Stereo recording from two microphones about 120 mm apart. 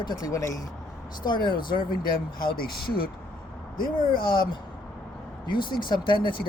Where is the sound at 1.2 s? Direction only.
40° left (ahead or behind).